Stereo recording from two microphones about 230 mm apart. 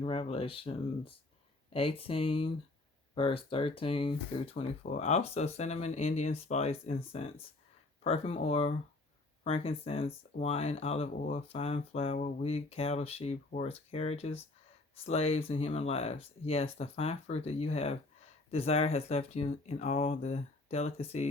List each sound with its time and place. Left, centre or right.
0.0 s speech: left